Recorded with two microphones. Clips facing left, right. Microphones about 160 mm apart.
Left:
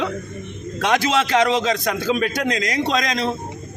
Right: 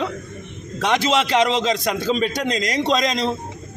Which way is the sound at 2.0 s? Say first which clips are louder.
Even; 5° left (ahead or behind).